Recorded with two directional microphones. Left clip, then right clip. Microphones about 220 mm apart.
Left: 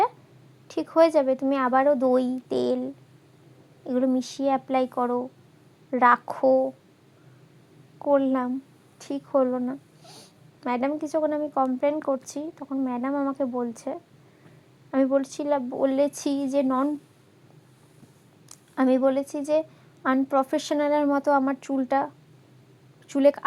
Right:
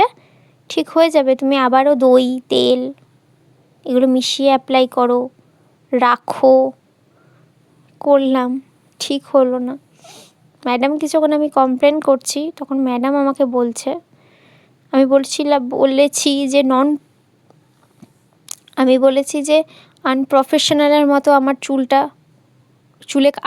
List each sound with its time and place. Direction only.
0.7 s speech: 30° right (ahead or behind)
7.9 s speech: 30° right (ahead or behind)
18.7 s a woman's voice: 30° right (ahead or behind)